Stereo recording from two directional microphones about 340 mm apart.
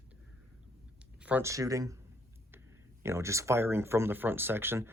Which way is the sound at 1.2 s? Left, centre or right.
Centre.